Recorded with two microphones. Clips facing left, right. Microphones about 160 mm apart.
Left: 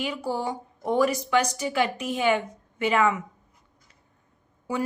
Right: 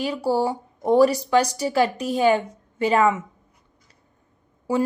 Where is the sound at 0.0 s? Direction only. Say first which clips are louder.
Right 6 dB; 35° right (ahead or behind).